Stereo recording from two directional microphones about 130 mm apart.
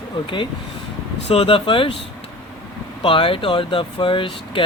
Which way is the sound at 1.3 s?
45° left (ahead or behind).